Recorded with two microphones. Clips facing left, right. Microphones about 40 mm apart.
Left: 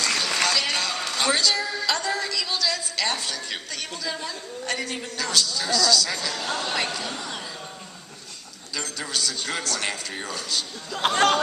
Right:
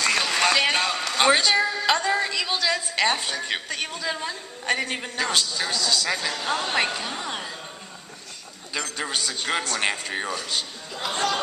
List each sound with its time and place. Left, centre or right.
0.0 s a sound: right
5.9 s a man's voice: right
8.7 s a man's voice: right
10.9 s speech: left